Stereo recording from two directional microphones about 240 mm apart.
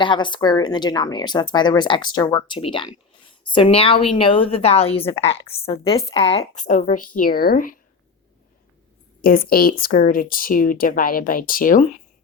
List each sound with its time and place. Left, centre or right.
0.0 s speech: centre; by 7.8 s left
9.2 s speech: left